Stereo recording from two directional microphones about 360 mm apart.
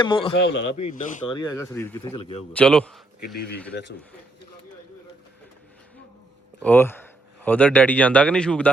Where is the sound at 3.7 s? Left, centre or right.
Left.